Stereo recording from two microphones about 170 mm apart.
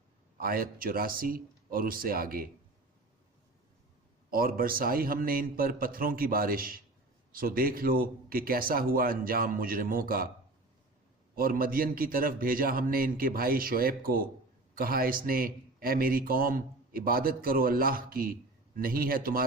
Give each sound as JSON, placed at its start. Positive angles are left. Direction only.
{"t": 0.3, "sound": "speech", "side_deg": -60}
{"t": 4.3, "sound": "speech", "side_deg": -60}
{"t": 11.3, "sound": "speech", "side_deg": -60}